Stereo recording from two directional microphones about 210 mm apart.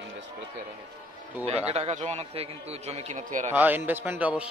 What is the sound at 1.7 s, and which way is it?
A man's voice, 30° right (ahead or behind).